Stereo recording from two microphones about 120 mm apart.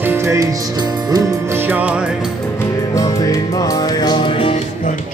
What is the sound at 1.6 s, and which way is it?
Music, 15° right (ahead or behind).